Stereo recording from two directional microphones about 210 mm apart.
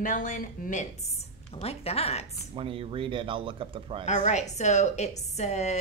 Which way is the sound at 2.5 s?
25° right (ahead or behind).